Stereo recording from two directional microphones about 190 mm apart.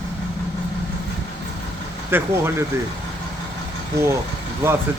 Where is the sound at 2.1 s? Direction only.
10° right (ahead or behind).